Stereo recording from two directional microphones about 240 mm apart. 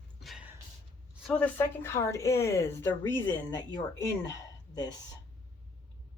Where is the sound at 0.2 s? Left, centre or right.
Centre.